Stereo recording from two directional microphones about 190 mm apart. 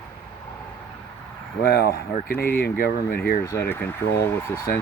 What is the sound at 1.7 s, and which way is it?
Speech, 55° left (ahead or behind).